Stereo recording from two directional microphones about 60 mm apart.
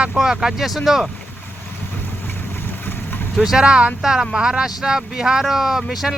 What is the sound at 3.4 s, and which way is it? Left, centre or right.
Speech, centre.